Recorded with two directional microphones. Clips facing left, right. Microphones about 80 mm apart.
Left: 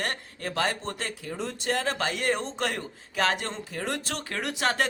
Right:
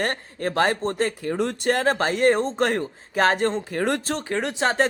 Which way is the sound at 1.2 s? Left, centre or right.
Right.